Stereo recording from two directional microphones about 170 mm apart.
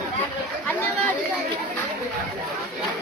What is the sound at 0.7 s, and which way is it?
Chatter, 10° left (ahead or behind).